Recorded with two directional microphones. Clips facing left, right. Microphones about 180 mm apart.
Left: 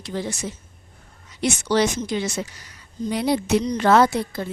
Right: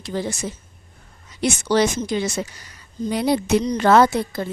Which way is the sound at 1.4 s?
35° right (ahead or behind).